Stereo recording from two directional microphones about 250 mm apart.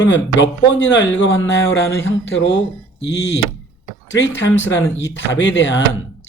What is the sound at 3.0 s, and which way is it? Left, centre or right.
Speech, left.